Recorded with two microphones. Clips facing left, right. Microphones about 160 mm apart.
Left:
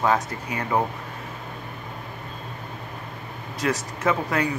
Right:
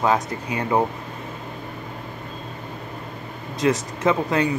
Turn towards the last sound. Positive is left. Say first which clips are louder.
# right 3 dB
turn(degrees=-20)  # may be behind; listen again after turning